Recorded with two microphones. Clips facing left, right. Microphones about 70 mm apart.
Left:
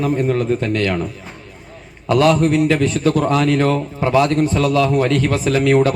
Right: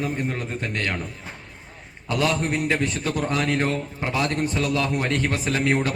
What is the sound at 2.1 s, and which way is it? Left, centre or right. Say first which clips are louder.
Speech: left 10 dB; left.